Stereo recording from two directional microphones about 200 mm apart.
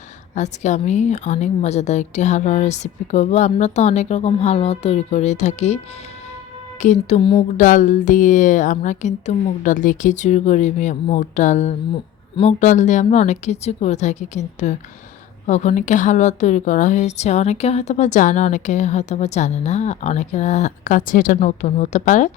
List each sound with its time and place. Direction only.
0.3 s a woman's voice: 35° left (ahead or behind)
7.5 s a woman's voice: 40° left (ahead or behind)